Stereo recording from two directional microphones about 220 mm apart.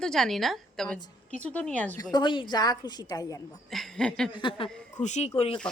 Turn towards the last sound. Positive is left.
turn(degrees=25)  # may be behind; listen again after turning